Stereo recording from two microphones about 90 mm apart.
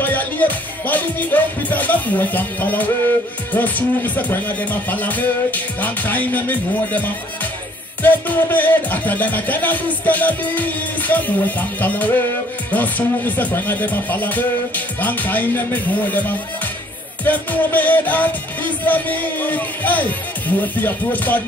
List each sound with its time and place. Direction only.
0.0 s music: 20° left (ahead or behind)